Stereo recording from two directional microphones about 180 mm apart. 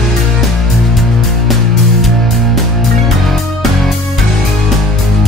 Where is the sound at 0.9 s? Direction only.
Centre (ahead or behind).